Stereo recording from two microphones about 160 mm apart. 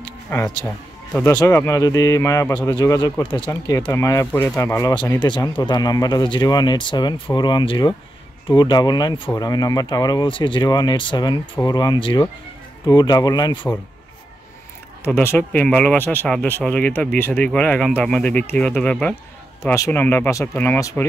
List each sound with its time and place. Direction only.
0.3 s speech: 15° left (ahead or behind)
3.9 s speech: 15° left (ahead or behind)
15.1 s speech: 15° left (ahead or behind)
19.6 s speech: 15° left (ahead or behind)